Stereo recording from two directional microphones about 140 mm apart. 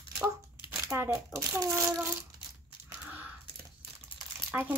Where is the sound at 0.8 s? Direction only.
15° right (ahead or behind).